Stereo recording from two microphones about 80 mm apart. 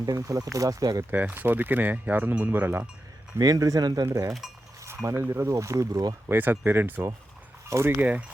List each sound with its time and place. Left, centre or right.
0.0 s speech: right
1.1 s speech: right
3.3 s speech: right
4.0 s speech: right
5.3 s speech: right
6.2 s speech: right
7.9 s speech: centre